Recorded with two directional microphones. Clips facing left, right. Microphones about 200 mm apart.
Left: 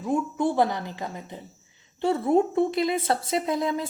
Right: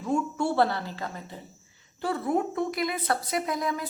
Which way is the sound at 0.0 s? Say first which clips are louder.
Left 2 dB; 15° left (ahead or behind).